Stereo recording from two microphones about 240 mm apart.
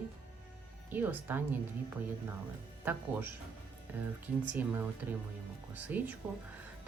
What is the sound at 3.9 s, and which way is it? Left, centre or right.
Speech, centre.